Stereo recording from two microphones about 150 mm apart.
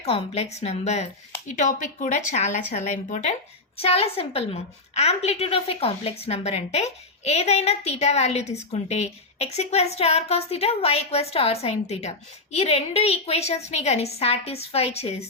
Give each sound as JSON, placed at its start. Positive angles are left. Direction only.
{"t": 0.0, "sound": "a woman's voice", "side_deg": 45}
{"t": 3.8, "sound": "a woman's voice", "side_deg": 40}